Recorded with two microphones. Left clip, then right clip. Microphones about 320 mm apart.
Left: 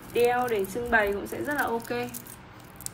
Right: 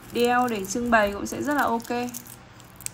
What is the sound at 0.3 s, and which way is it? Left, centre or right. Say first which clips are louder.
Speech: right 3 dB; left.